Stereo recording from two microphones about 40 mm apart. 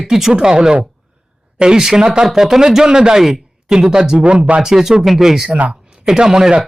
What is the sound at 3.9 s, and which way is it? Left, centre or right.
Speech, centre.